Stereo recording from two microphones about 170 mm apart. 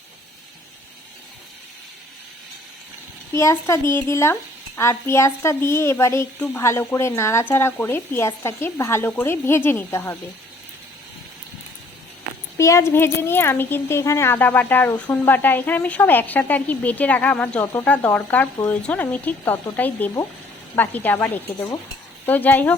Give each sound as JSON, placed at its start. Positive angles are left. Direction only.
{"t": 3.3, "sound": "a child's voice", "side_deg": 15}
{"t": 12.5, "sound": "a child's voice", "side_deg": 15}